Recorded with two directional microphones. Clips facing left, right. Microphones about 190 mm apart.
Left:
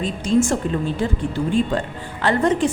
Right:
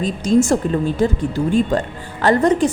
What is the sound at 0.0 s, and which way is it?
A woman's voice, 40° right (ahead or behind).